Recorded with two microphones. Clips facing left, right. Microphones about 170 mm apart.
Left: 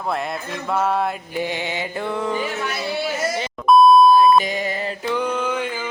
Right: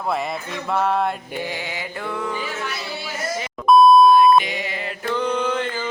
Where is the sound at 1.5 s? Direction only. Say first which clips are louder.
Left 4 dB; 25° left (ahead or behind).